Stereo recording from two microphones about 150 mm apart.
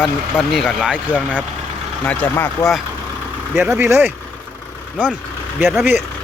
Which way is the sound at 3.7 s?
15° right (ahead or behind).